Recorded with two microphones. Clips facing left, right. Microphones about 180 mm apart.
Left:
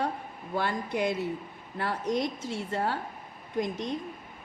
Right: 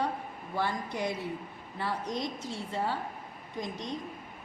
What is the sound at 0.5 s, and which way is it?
Speech, 65° left (ahead or behind).